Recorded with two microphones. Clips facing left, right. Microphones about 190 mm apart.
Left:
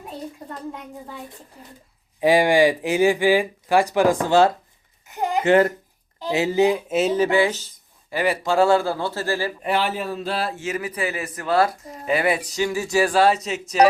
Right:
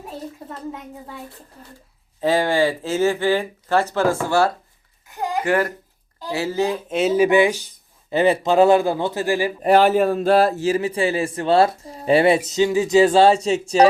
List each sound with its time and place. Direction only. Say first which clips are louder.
0.1 s a child's voice: even; centre (ahead or behind)
2.2 s speech: left 2 dB; 15° left (ahead or behind)
5.0 s a sound: left 2 dB; 20° left (ahead or behind)
6.1 s speech: left 3 dB; 20° left (ahead or behind); by 7.2 s centre (ahead or behind)
7.2 s speech: right 3 dB; 15° right (ahead or behind)
9.6 s speech: right 9 dB; 40° right (ahead or behind)